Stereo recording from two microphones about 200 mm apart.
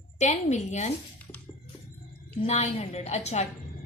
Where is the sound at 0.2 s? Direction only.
35° left (ahead or behind).